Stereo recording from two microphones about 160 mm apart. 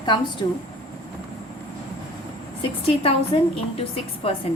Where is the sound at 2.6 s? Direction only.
35° left (ahead or behind).